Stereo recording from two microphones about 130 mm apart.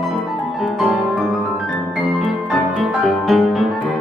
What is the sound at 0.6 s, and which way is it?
Music, 5° right (ahead or behind).